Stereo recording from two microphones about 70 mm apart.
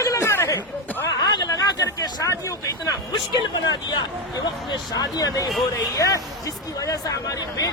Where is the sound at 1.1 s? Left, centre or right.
Left.